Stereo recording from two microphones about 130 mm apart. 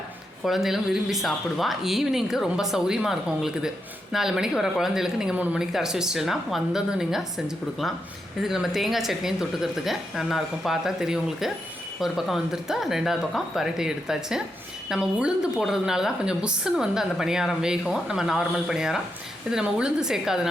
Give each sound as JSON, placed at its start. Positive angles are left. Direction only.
{"t": 0.4, "sound": "a woman's voice", "side_deg": 0}